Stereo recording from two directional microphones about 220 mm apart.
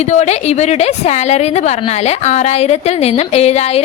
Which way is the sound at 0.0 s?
30° left (ahead or behind).